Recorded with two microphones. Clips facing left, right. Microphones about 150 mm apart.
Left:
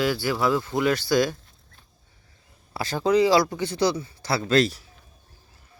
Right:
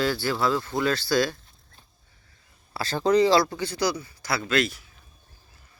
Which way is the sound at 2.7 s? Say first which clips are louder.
Even; 10° left (ahead or behind).